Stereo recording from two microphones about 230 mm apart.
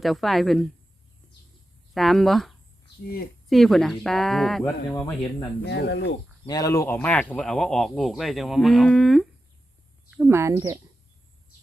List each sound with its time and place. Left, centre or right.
0.0 s speech: centre
1.9 s speech: centre
5.6 s speech: left
6.4 s speech: centre
10.2 s speech: centre